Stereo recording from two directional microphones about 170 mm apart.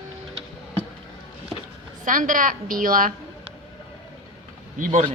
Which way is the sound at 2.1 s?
50° right (ahead or behind).